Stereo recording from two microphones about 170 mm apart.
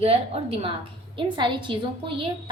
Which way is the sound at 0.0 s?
35° right (ahead or behind).